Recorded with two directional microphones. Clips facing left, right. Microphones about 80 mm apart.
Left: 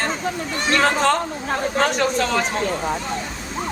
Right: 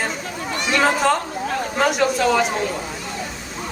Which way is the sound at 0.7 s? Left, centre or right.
Centre.